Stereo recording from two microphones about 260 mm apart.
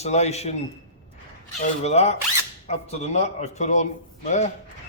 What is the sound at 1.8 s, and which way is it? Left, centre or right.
A man's voice, left.